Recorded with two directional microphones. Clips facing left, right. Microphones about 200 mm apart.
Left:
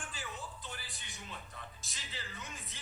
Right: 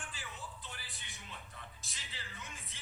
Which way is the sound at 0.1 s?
45° left (ahead or behind).